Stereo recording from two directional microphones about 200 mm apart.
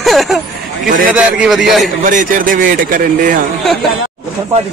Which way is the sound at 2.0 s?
40° right (ahead or behind).